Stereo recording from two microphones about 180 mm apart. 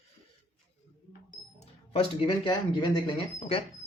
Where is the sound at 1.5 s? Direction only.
35° left (ahead or behind).